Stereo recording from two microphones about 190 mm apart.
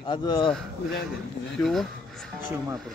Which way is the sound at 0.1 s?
25° left (ahead or behind).